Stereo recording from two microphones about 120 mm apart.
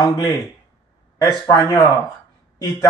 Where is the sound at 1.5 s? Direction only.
30° left (ahead or behind).